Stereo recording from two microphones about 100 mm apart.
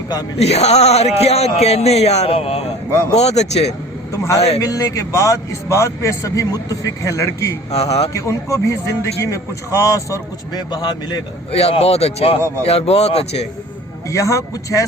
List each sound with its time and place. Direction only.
0.3 s speech: 90° left
4.1 s a man's voice: 30° left (ahead or behind)
4.4 s speech: 90° left
4.6 s a man's voice: 35° left (ahead or behind)
7.7 s speech: 90° left
8.1 s a man's voice: 30° left (ahead or behind)
11.5 s speech: 90° left
14.1 s a man's voice: 30° left (ahead or behind)